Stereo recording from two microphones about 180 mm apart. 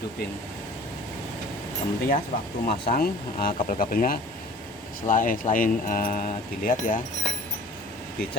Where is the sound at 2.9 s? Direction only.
55° left (ahead or behind).